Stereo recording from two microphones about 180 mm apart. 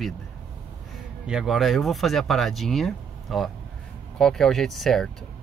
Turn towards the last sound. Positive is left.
turn(degrees=0)  # may be behind; listen again after turning